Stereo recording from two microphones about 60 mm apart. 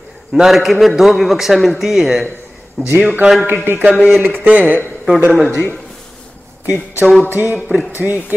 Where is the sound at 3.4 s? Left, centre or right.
Right.